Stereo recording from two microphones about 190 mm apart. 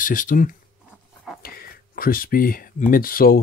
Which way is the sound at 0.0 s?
45° left (ahead or behind).